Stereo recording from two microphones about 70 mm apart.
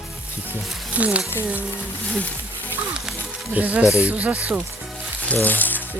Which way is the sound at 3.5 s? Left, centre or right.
Right.